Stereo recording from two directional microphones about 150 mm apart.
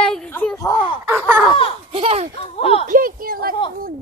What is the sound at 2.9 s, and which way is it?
Speech, 70° right (ahead or behind).